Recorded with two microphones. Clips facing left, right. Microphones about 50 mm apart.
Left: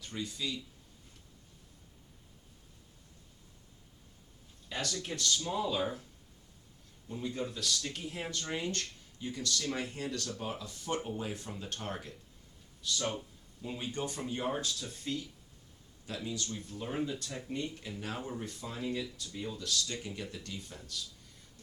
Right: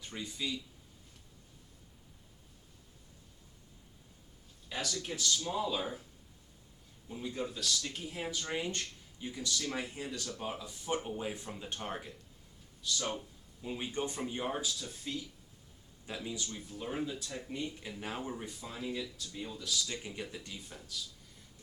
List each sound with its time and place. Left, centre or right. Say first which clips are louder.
0.0 s speech: left 1 dB; centre
4.7 s speech: left 1 dB; centre
7.1 s speech: left 1 dB; centre
16.0 s speech: left 2 dB; centre